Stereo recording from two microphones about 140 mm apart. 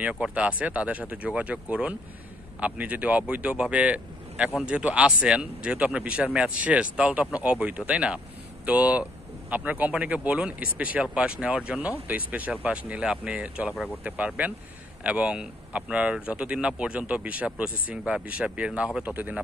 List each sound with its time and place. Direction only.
0.0 s speech: 10° right (ahead or behind)
17.6 s speech: 85° left
18.0 s speech: 10° right (ahead or behind)